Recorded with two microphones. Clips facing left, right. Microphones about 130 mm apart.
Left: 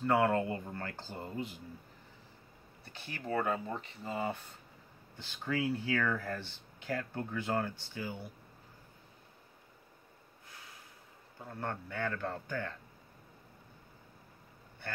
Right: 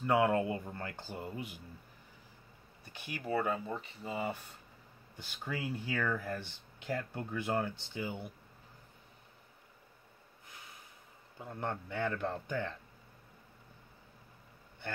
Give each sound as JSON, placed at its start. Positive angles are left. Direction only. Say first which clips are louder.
{"t": 0.0, "sound": "speech", "louder": "even", "side_deg": -15}
{"t": 2.8, "sound": "speech", "louder": "right 1 dB", "side_deg": -15}
{"t": 11.3, "sound": "speech", "louder": "right 1 dB", "side_deg": -15}